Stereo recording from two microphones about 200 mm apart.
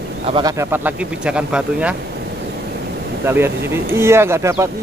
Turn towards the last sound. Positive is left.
turn(degrees=-15)  # may be behind; listen again after turning